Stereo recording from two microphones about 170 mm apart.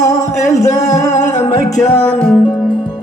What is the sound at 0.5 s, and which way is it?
Singing, 45° left (ahead or behind).